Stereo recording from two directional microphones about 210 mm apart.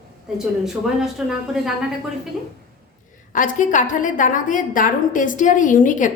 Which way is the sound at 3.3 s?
40° left (ahead or behind).